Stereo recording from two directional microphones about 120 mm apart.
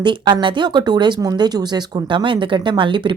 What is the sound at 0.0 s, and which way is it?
Speech, 40° right (ahead or behind).